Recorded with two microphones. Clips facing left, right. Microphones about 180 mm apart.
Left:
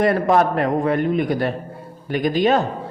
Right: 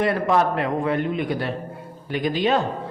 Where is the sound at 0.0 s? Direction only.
45° left (ahead or behind).